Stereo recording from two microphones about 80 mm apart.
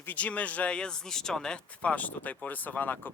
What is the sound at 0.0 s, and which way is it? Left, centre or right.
Speech, centre.